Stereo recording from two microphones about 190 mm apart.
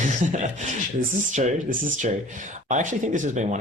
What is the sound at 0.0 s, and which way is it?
Speech, 40° right (ahead or behind).